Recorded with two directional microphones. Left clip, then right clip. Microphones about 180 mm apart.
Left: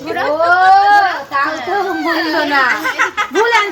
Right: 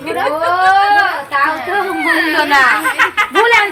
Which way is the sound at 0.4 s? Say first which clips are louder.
Left 2 dB; 20° left (ahead or behind).